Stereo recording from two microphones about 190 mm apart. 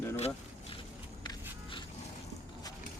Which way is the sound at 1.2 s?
20° left (ahead or behind).